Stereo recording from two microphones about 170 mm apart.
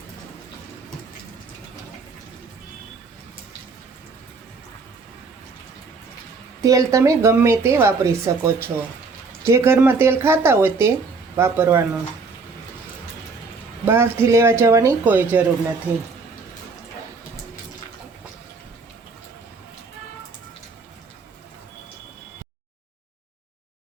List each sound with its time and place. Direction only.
6.6 s a woman's voice: 20° right (ahead or behind)
13.8 s a woman's voice: 15° right (ahead or behind)